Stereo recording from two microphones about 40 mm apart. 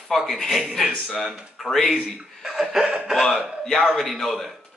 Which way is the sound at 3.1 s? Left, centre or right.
Centre.